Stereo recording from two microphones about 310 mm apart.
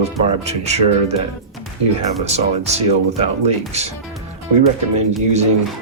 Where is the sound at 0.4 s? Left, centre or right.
Right.